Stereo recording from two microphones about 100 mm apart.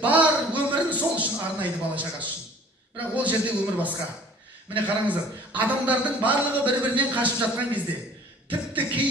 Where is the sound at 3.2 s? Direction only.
15° right (ahead or behind).